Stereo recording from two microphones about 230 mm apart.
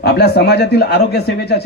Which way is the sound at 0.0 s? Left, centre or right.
Left.